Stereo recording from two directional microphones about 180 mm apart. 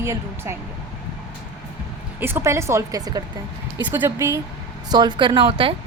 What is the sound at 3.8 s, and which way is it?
Speech, 10° right (ahead or behind).